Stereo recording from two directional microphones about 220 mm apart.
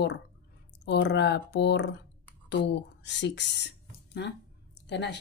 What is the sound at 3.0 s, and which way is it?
Speech, 50° left (ahead or behind).